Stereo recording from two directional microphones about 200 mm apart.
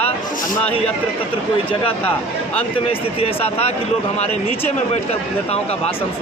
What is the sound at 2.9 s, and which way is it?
Speech, 30° left (ahead or behind).